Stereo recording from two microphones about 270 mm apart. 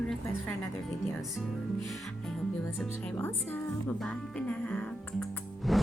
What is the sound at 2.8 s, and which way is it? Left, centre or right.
Speech, centre.